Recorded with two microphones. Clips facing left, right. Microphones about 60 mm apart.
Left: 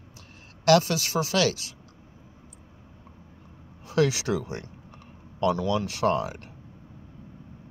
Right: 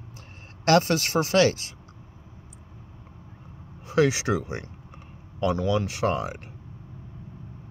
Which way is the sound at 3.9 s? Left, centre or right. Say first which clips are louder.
Right 2 dB; right.